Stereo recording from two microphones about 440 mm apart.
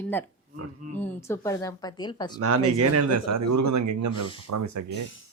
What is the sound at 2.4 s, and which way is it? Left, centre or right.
A man's voice, right.